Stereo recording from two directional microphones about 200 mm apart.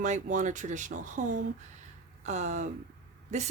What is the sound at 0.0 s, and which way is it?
Speech, 40° right (ahead or behind).